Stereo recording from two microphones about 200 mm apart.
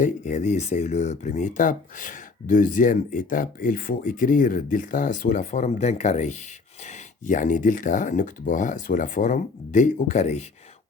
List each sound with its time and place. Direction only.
0.0 s speech: 35° left (ahead or behind)